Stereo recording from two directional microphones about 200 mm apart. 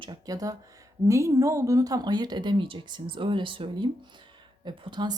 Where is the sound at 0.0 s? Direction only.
20° right (ahead or behind).